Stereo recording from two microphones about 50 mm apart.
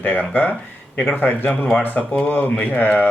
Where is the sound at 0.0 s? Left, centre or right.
Left.